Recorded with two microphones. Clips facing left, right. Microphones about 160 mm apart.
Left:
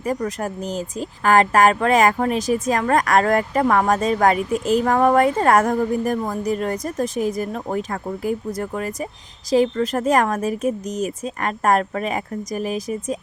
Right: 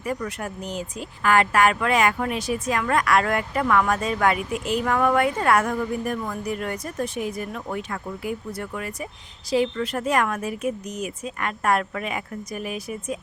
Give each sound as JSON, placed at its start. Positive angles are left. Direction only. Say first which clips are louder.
{"t": 0.0, "sound": "speech", "louder": "left 5 dB", "side_deg": 40}